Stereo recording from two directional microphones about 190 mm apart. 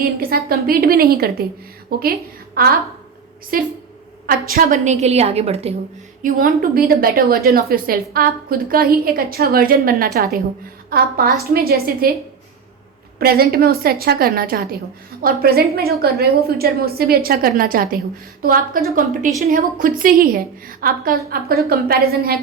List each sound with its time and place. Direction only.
0.0 s a woman's voice: 50° right (ahead or behind)
3.5 s a woman's voice: 50° right (ahead or behind); by 5.7 s 35° right (ahead or behind)
6.2 s a woman's voice: 50° right (ahead or behind)
13.1 s a woman's voice: 55° right (ahead or behind)